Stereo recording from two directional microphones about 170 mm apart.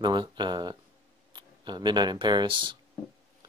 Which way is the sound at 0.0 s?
25° right (ahead or behind).